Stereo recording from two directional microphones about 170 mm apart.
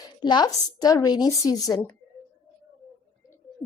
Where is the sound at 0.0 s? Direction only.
25° left (ahead or behind).